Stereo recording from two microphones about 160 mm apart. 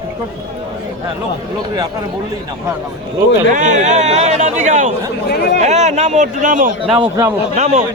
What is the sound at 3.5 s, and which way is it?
Speech, 50° right (ahead or behind).